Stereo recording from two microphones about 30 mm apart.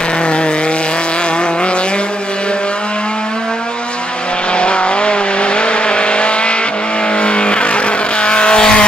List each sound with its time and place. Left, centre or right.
4.6 s vehicle: left